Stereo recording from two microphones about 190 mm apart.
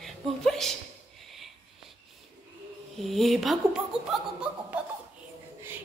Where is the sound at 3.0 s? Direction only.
Centre (ahead or behind).